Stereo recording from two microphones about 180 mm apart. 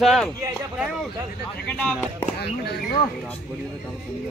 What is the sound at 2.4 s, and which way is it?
Speech, 65° left (ahead or behind).